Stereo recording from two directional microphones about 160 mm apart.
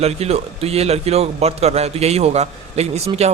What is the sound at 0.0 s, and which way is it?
A man's voice, 40° right (ahead or behind).